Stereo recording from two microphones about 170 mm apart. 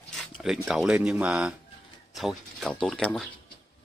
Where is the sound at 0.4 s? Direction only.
Centre (ahead or behind).